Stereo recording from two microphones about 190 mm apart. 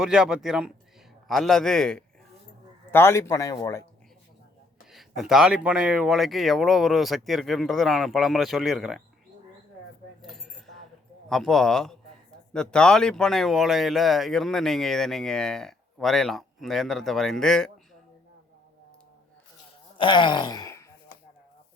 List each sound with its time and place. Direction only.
0.0 s speech: 5° right (ahead or behind); by 3.8 s 20° left (ahead or behind)
4.9 s speech: centre (ahead or behind)
10.2 s a sound: centre (ahead or behind)
11.3 s speech: centre (ahead or behind)
20.0 s wail: 25° left (ahead or behind)